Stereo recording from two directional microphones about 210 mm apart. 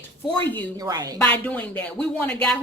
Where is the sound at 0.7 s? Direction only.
15° right (ahead or behind).